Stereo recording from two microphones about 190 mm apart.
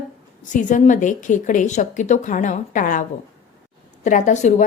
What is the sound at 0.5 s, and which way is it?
A woman's voice, 40° left (ahead or behind).